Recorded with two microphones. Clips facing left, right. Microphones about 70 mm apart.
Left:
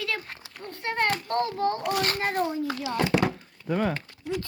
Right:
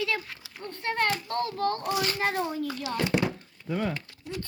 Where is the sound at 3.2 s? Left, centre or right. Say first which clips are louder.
Left 3 dB; left.